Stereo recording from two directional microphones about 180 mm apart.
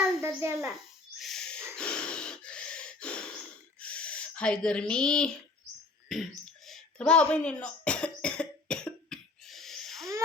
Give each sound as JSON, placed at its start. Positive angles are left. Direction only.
{"t": 0.2, "sound": "a child's voice", "side_deg": -15}
{"t": 1.2, "sound": "a sound", "side_deg": 0}
{"t": 6.7, "sound": "cough", "side_deg": 5}